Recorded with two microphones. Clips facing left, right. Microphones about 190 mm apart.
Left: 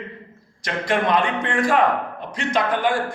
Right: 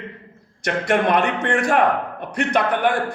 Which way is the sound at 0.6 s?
70° right (ahead or behind).